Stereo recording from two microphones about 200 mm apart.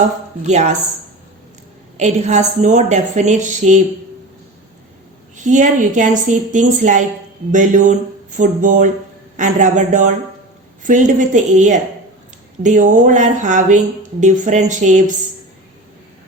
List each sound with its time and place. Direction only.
0.4 s a woman's voice: 35° right (ahead or behind)
2.0 s a woman's voice: 35° right (ahead or behind)
5.4 s a woman's voice: 40° right (ahead or behind)